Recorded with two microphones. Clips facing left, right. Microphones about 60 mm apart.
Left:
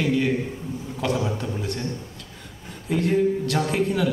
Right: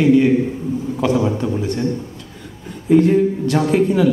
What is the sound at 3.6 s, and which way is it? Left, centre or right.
Speech, centre.